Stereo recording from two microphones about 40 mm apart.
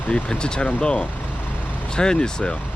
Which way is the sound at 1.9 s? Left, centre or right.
Centre.